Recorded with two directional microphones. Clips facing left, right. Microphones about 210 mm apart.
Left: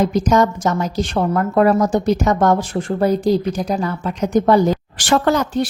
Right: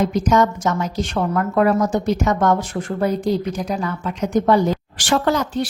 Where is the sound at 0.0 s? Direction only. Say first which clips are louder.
Left 2 dB; 35° left (ahead or behind).